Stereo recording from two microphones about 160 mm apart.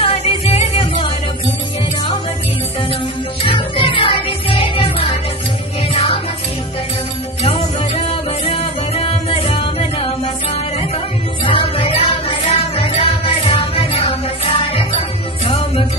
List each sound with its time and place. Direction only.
0.0 s music: 40° left (ahead or behind)
3.4 s music: 35° left (ahead or behind)
7.4 s music: 35° left (ahead or behind)